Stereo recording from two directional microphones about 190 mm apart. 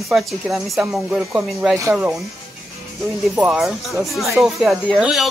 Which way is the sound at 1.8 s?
15° right (ahead or behind).